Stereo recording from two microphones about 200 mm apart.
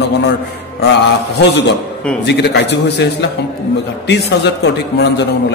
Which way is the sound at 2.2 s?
55° left (ahead or behind).